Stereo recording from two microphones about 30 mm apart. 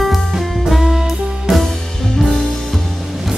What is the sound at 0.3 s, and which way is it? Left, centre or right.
Music, centre.